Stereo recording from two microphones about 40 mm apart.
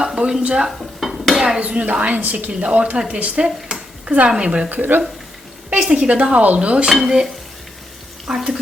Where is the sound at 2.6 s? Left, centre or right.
Right.